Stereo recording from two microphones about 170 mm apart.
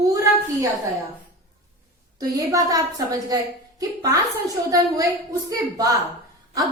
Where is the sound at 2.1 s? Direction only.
20° right (ahead or behind).